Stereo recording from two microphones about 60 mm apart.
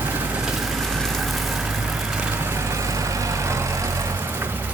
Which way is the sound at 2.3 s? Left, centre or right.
Right.